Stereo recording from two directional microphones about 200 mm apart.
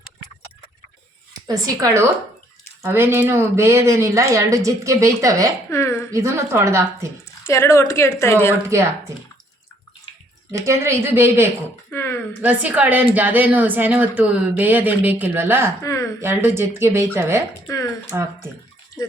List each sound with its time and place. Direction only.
1.5 s speech: 20° right (ahead or behind)
5.7 s speech: 15° left (ahead or behind)
6.1 s speech: 15° right (ahead or behind)
7.4 s speech: 15° left (ahead or behind)
8.7 s speech: 15° right (ahead or behind)
10.5 s speech: 15° right (ahead or behind)
11.9 s a sound: 10° left (ahead or behind)
12.4 s speech: 10° right (ahead or behind)
15.8 s speech: 15° left (ahead or behind)
16.2 s speech: 10° right (ahead or behind)
17.7 s speech: 15° left (ahead or behind)
18.1 s speech: 10° right (ahead or behind)